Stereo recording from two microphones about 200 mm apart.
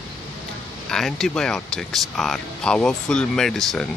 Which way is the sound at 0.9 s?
Centre (ahead or behind).